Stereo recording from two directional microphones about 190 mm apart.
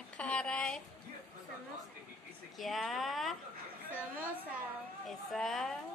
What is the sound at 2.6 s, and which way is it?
Speech, centre (ahead or behind).